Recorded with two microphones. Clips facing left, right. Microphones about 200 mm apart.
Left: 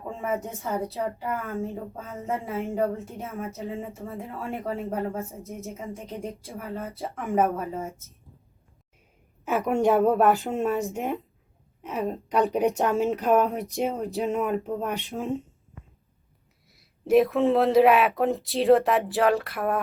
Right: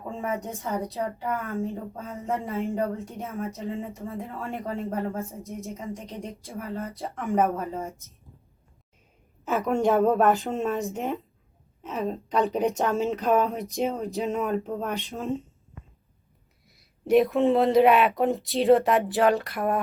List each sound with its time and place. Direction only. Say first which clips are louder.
0.2 s speech: left 1 dB; centre (ahead or behind)
9.4 s a woman's voice: left 1 dB; 15° left (ahead or behind)
9.6 s speech: left 1 dB; centre (ahead or behind)
10.9 s a woman's voice: even; 15° left (ahead or behind)
13.4 s speech: left 1 dB; centre (ahead or behind)
14.8 s a woman's voice: even; 15° left (ahead or behind)
16.6 s speech: even; centre (ahead or behind)